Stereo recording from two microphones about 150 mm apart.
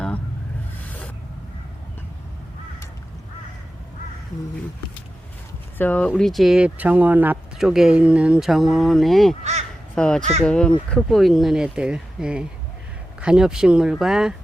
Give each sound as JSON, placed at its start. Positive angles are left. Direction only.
{"t": 5.7, "sound": "speech", "side_deg": 10}
{"t": 9.4, "sound": "crow", "side_deg": -50}
{"t": 9.9, "sound": "speech", "side_deg": 5}